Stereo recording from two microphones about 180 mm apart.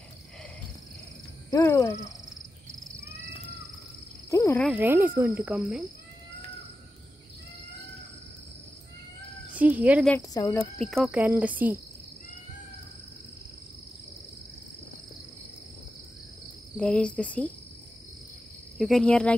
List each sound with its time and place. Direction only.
1.5 s a sound: 15° left (ahead or behind)
4.3 s cricket: 15° left (ahead or behind)
4.6 s speech: 10° right (ahead or behind)
9.6 s speech: 10° right (ahead or behind)
10.3 s speech: 20° left (ahead or behind)
10.8 s speech: centre (ahead or behind)
16.7 s speech: 5° left (ahead or behind)
18.8 s speech: centre (ahead or behind)